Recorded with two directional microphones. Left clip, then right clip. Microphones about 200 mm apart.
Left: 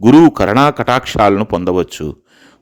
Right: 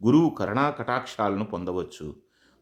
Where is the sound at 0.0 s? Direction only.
50° left (ahead or behind).